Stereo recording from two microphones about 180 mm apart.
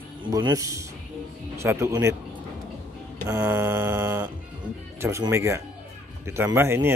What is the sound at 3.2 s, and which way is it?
Mantra, 15° right (ahead or behind).